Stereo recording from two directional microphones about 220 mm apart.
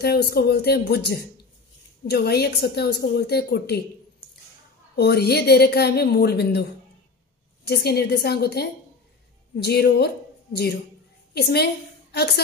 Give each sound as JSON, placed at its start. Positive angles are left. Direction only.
{"t": 0.0, "sound": "a woman's voice", "side_deg": 45}
{"t": 4.9, "sound": "a woman's voice", "side_deg": 45}